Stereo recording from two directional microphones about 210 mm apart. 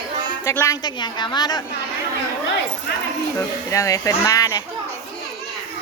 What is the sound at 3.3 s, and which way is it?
Speech, 15° left (ahead or behind).